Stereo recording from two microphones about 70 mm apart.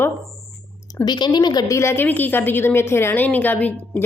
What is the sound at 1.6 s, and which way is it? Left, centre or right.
Speech, left.